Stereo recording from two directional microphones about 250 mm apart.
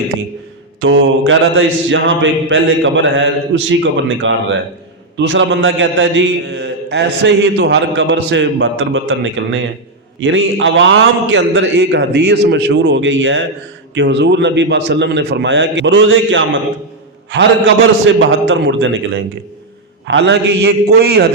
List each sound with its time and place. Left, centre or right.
0.8 s a man's voice: right